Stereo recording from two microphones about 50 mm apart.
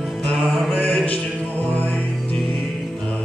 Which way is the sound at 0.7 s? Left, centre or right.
Left.